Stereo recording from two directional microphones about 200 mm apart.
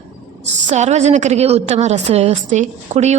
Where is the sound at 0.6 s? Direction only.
35° right (ahead or behind).